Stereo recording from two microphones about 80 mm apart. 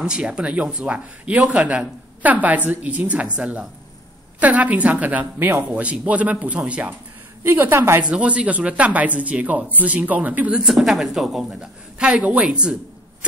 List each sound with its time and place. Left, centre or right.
0.0 s speech: centre
7.4 s speech: right
8.0 s speech: centre
10.6 s a woman's voice: centre